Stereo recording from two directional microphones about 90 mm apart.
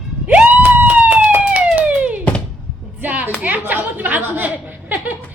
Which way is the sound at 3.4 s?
20° right (ahead or behind).